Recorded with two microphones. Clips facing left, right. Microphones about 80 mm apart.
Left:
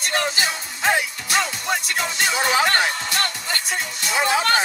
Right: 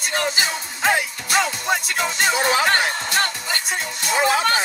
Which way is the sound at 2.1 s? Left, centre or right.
Right.